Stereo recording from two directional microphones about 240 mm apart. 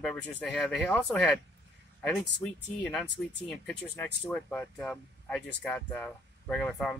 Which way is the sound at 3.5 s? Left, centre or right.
Centre.